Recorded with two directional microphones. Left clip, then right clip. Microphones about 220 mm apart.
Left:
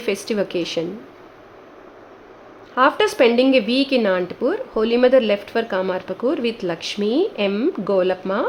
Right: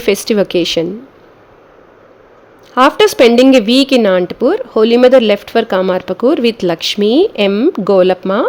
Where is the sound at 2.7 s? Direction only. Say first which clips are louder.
Right 8 dB; 35° right (ahead or behind).